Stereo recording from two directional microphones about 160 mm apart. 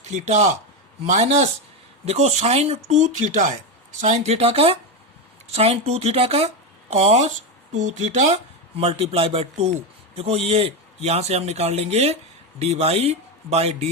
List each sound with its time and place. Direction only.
0.0 s a man's voice: 45° right (ahead or behind)